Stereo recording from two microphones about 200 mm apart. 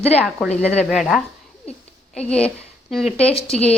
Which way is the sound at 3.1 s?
30° left (ahead or behind).